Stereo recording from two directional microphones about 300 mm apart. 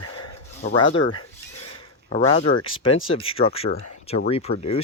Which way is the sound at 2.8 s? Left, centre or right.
Left.